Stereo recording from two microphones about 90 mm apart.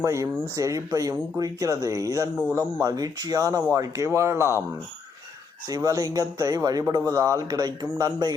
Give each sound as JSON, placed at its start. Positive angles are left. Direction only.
{"t": 0.0, "sound": "speech", "side_deg": -35}
{"t": 5.6, "sound": "speech", "side_deg": -40}